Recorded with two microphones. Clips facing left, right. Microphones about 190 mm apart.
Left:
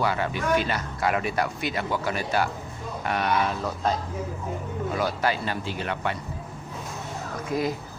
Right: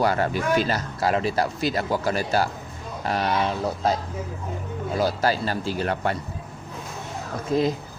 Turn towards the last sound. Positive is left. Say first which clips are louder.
# right 4 dB
turn(degrees=-25)  # may be behind; listen again after turning